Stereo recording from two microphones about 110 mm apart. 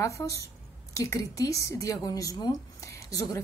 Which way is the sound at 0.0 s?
30° left (ahead or behind).